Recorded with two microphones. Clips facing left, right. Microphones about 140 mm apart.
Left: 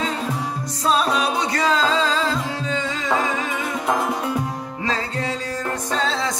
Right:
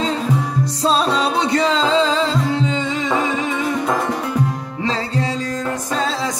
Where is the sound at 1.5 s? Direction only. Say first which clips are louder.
Right 4 dB; 25° right (ahead or behind).